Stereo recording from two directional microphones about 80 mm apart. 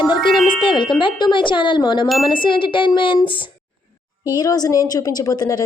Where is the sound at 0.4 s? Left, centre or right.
Left.